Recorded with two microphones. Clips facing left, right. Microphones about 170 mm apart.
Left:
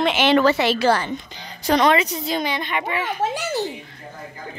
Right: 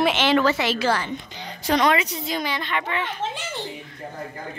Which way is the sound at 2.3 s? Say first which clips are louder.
Left 3 dB; 20° left (ahead or behind).